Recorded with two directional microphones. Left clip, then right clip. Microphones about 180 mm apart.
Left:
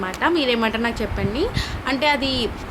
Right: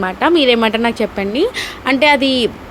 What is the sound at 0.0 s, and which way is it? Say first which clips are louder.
A woman's voice: right 7 dB; 45° right (ahead or behind).